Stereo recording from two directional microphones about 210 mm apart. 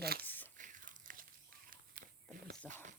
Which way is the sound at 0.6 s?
40° right (ahead or behind).